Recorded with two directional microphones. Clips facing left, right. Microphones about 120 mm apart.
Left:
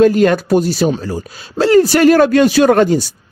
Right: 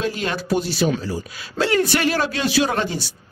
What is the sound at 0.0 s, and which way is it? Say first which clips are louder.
Speech: left 14 dB; 50° left (ahead or behind).